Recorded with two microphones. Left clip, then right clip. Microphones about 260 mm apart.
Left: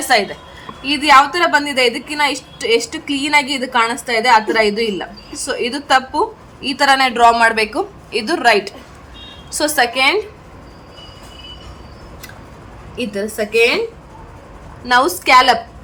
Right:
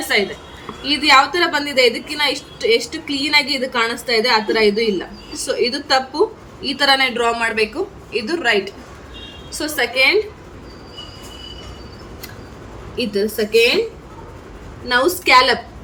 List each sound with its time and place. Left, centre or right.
1.0 s a woman's voice: centre
13.3 s a woman's voice: centre
14.8 s a woman's voice: centre